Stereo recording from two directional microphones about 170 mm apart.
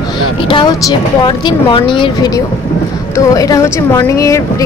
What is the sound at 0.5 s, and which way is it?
A woman's voice, 25° left (ahead or behind).